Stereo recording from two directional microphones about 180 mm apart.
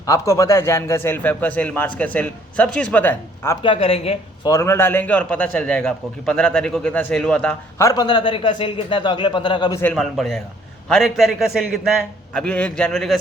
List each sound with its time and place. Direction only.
0.0 s a man's voice: 15° left (ahead or behind)
3.6 s speech: 30° left (ahead or behind)
4.4 s a man's voice: 15° left (ahead or behind)
9.8 s a man's voice: centre (ahead or behind)